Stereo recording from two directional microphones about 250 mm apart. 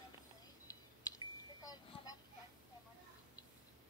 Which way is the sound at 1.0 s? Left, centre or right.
Centre.